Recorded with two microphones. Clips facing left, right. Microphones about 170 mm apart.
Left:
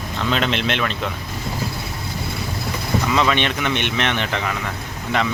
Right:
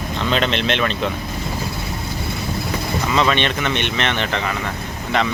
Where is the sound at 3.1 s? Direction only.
5° left (ahead or behind).